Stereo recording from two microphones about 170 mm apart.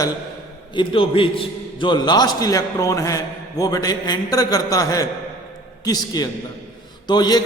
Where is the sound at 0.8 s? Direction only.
30° left (ahead or behind).